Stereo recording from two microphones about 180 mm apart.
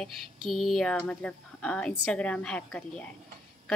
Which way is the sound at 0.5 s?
Centre (ahead or behind).